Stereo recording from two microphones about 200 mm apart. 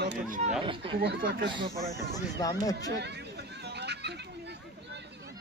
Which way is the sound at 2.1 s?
20° left (ahead or behind).